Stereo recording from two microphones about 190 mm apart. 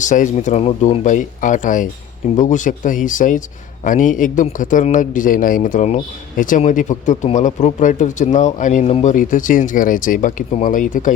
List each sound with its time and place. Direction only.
0.0 s a man's voice: 40° left (ahead or behind)